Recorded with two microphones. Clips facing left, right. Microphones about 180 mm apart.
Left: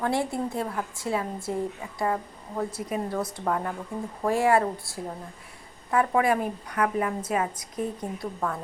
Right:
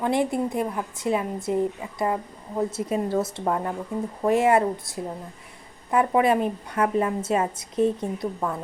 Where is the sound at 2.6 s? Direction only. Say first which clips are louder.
Right 4 dB; 25° right (ahead or behind).